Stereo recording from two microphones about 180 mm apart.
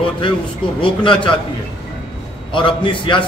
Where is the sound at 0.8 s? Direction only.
30° left (ahead or behind).